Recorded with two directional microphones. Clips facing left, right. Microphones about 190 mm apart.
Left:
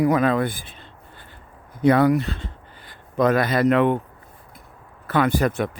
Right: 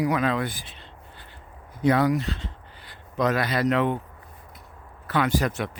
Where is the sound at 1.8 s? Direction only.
60° left (ahead or behind).